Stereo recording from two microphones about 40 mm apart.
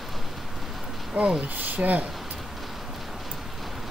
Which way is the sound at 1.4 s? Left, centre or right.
Right.